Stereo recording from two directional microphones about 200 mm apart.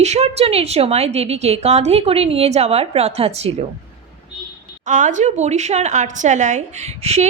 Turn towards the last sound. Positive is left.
turn(degrees=-35)  # may be behind; listen again after turning